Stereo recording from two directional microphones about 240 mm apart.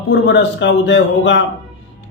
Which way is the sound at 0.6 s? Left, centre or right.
Left.